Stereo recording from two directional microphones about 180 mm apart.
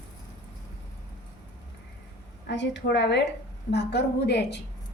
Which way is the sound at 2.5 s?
75° left (ahead or behind).